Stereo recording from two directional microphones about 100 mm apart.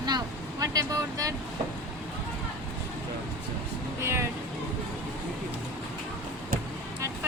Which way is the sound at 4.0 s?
25° right (ahead or behind).